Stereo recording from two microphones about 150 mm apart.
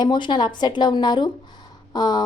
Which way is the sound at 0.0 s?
30° left (ahead or behind).